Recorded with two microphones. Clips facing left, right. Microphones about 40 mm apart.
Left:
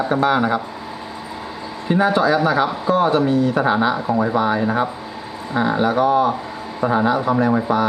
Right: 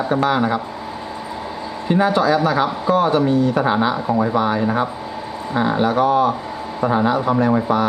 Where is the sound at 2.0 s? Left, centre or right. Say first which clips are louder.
Left 1 dB; centre.